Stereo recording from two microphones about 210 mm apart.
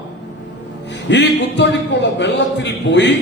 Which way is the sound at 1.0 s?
55° left (ahead or behind).